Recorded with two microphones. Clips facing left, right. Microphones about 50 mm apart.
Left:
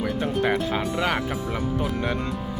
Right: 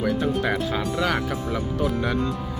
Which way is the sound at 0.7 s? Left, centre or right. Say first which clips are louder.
Even; left.